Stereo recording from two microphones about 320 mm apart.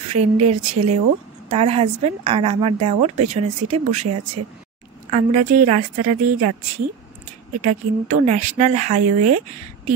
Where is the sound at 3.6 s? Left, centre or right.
Right.